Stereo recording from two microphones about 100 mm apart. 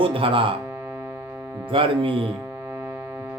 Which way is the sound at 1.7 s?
65° right (ahead or behind).